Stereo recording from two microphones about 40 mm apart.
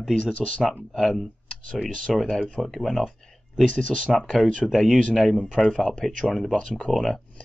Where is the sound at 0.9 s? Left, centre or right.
Centre.